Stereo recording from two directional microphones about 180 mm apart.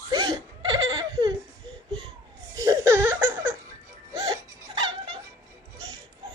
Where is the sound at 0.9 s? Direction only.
25° right (ahead or behind).